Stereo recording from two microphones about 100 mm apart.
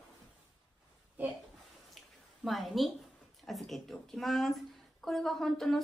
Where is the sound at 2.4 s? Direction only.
Centre (ahead or behind).